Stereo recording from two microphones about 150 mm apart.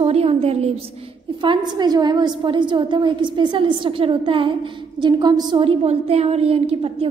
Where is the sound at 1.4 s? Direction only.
30° right (ahead or behind).